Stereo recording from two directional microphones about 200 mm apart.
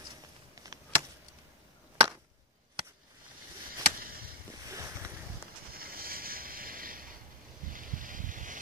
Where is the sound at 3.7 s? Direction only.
45° right (ahead or behind).